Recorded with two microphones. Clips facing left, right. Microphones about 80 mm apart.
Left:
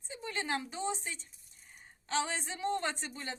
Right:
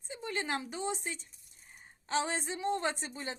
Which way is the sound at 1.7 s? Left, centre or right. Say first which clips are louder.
Right 1 dB; centre.